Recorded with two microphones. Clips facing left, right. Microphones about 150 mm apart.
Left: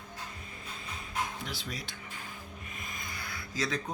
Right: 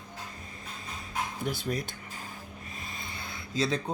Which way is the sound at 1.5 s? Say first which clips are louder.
Right 9 dB; 50° right (ahead or behind).